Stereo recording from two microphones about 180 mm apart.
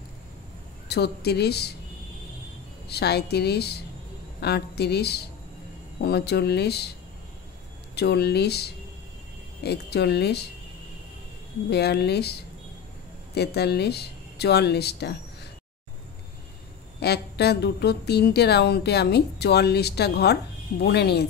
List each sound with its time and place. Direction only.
0.8 s a woman's voice: 65° left (ahead or behind)
2.9 s a woman's voice: 65° left (ahead or behind)
7.9 s a woman's voice: 65° left (ahead or behind)
11.7 s a woman's voice: 65° left (ahead or behind)
17.0 s a woman's voice: 65° left (ahead or behind)